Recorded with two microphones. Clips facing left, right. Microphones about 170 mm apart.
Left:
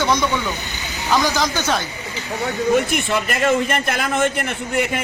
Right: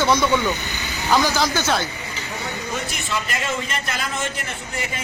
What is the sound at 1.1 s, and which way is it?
Speech, 10° right (ahead or behind).